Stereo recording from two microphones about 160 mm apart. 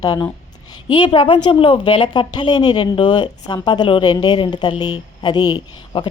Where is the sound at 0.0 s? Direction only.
25° left (ahead or behind).